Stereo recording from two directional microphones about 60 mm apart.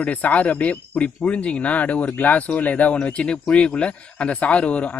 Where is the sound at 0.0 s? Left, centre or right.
Left.